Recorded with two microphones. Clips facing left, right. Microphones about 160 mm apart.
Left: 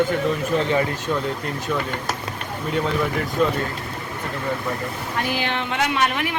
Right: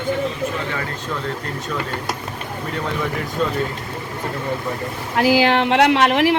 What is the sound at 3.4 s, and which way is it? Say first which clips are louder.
Speech: left 2 dB; 10° left (ahead or behind).